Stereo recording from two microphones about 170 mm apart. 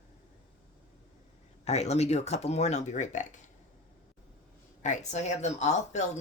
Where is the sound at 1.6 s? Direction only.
40° left (ahead or behind).